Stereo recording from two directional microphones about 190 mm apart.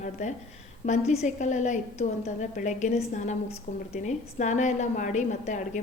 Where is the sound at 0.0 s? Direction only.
40° left (ahead or behind).